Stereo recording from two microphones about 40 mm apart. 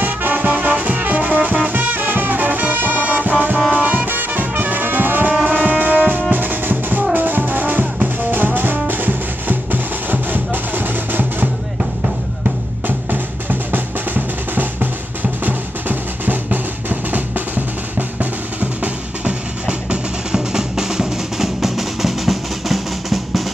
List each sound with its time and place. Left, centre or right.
0.0 s music: right
12.8 s music: right
18.2 s drum: right
20.3 s music: centre